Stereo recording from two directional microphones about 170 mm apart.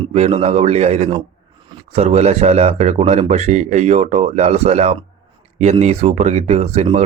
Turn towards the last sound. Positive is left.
turn(degrees=-40)  # may be behind; listen again after turning